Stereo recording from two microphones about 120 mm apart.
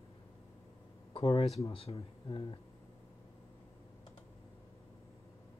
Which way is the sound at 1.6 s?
50° left (ahead or behind).